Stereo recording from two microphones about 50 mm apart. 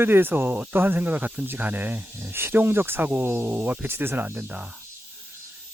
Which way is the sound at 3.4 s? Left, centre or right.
Right.